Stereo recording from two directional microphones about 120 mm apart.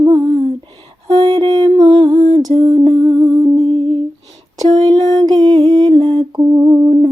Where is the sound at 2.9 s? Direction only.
40° right (ahead or behind).